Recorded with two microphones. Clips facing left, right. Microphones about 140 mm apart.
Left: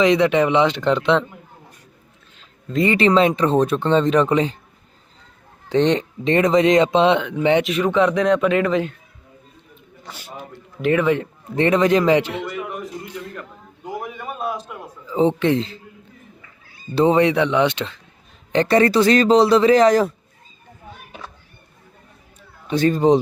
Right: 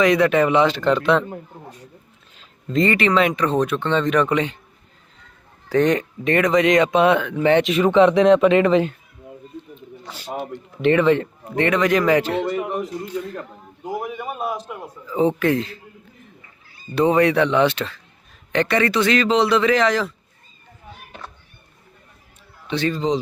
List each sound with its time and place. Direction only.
0.0 s speech: 20° left (ahead or behind)
3.0 s speech: 30° left (ahead or behind)
5.6 s speech: 25° left (ahead or behind)
7.6 s speech: centre (ahead or behind)
10.2 s a sound: 80° right
10.8 s a man's voice: 10° left (ahead or behind)
11.5 s speech: 30° left (ahead or behind)
12.5 s a man's voice: 30° right (ahead or behind)
13.8 s a sound: 5° right (ahead or behind)
15.4 s speech: 25° left (ahead or behind)
16.9 s speech: 30° left (ahead or behind)
18.5 s speech: 35° left (ahead or behind)
21.1 s children playing: 10° left (ahead or behind)
22.6 s a man's voice: 45° left (ahead or behind)